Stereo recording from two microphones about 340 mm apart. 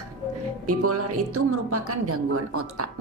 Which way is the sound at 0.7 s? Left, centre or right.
Right.